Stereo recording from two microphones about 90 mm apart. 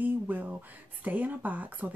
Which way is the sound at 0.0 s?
20° right (ahead or behind).